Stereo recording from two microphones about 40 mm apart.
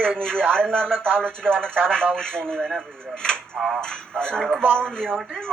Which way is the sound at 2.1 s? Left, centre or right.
Centre.